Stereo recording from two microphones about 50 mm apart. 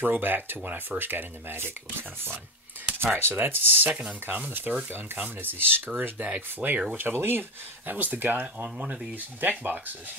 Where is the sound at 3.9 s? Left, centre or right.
Right.